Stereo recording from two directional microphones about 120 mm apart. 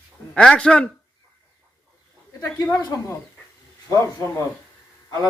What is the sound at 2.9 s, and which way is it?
Speech, 30° left (ahead or behind).